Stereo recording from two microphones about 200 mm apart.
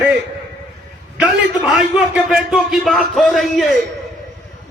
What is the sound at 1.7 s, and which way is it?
A man's voice, centre (ahead or behind).